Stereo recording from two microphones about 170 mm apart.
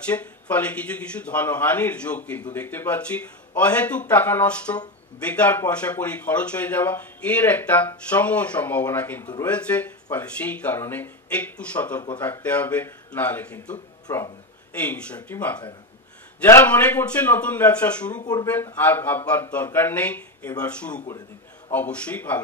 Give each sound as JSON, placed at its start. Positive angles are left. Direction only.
{"t": 0.0, "sound": "speech", "side_deg": 10}
{"t": 14.0, "sound": "speech", "side_deg": 20}
{"t": 14.7, "sound": "speech", "side_deg": 10}
{"t": 18.2, "sound": "speech", "side_deg": 25}
{"t": 18.8, "sound": "speech", "side_deg": 10}